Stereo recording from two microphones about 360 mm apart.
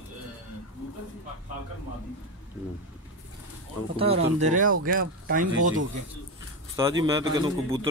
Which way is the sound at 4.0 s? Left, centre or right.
Centre.